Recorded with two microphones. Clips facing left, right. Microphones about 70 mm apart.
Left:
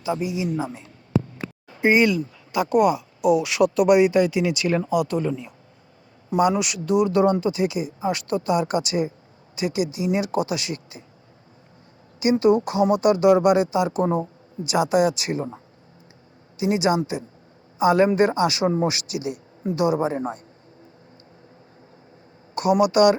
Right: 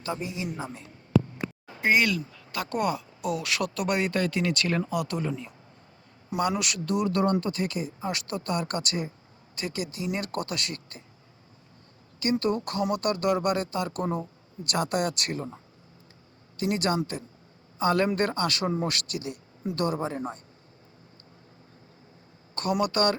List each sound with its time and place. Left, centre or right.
0.0 s speech: centre
1.8 s speech: left; by 5.5 s centre
6.6 s speech: centre
12.2 s speech: centre
14.0 s speech: left
14.6 s speech: centre
15.4 s speech: left
16.6 s speech: centre
22.5 s speech: centre